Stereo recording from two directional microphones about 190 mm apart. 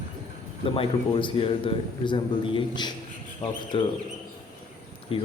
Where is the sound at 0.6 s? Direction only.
30° left (ahead or behind).